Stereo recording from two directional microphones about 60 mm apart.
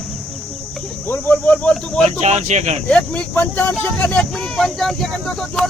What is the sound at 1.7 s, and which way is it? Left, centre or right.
Speech, centre.